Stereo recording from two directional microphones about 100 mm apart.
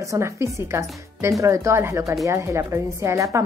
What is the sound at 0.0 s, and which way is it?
A woman's voice, 30° right (ahead or behind).